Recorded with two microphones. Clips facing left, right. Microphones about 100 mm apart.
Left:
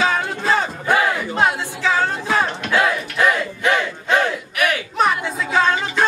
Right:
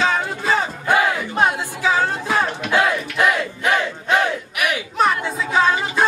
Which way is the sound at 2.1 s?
Centre (ahead or behind).